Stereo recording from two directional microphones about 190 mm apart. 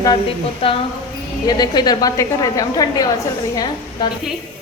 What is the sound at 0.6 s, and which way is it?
A woman's voice, 30° left (ahead or behind).